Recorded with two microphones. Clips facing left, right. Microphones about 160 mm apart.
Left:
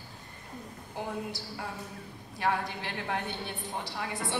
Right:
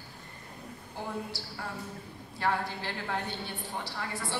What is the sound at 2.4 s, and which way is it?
A woman's voice, 15° left (ahead or behind).